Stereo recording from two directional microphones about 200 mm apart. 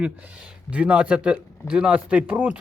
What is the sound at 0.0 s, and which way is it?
Speech, 5° right (ahead or behind).